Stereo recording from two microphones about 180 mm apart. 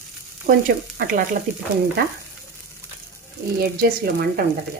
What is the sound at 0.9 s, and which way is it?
Speech, 50° right (ahead or behind).